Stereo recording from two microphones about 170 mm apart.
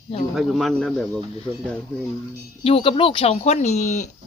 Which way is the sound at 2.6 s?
35° left (ahead or behind).